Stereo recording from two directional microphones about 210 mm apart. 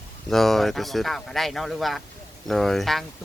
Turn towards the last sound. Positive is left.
turn(degrees=0)  # may be behind; listen again after turning